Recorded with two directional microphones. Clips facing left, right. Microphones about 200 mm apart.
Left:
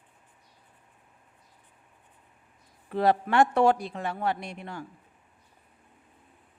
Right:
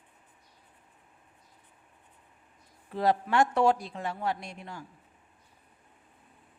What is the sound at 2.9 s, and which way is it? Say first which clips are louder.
Speech: left 3 dB; 65° left (ahead or behind).